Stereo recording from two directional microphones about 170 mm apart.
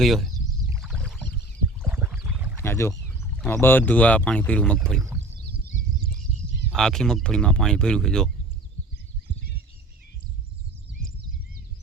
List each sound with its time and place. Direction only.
0.0 s speech: centre (ahead or behind)
0.8 s rowboat: centre (ahead or behind)
1.8 s a sound: 10° right (ahead or behind)
2.6 s speech: 15° left (ahead or behind)
5.5 s a sound: 65° right (ahead or behind)
6.7 s speech: 5° left (ahead or behind)